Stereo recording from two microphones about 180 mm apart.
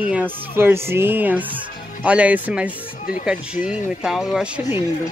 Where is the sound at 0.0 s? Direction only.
10° right (ahead or behind).